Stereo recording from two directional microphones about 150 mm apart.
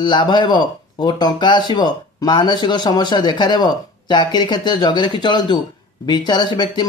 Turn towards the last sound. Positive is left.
turn(degrees=30)  # may be behind; listen again after turning